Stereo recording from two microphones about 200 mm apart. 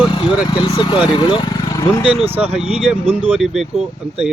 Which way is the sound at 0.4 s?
20° left (ahead or behind).